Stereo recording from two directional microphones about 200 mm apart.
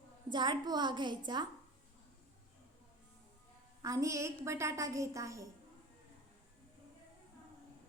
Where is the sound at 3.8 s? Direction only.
15° right (ahead or behind).